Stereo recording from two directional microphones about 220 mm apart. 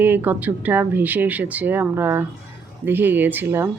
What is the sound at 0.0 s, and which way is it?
Speech, 10° right (ahead or behind).